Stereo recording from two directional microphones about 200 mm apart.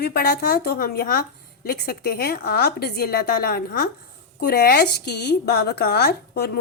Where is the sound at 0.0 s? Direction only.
50° left (ahead or behind).